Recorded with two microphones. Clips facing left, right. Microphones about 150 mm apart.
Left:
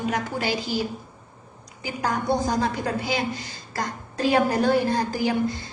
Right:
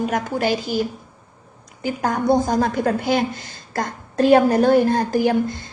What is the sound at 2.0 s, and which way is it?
A woman's voice, 50° right (ahead or behind).